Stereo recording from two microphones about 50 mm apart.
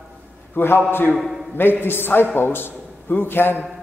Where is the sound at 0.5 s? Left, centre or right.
Left.